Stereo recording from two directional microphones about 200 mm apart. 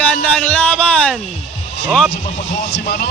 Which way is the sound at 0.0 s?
5° left (ahead or behind).